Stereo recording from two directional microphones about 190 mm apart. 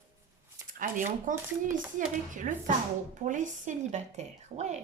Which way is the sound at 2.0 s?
45° right (ahead or behind).